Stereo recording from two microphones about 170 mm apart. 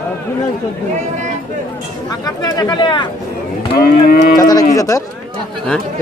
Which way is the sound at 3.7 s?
60° left (ahead or behind).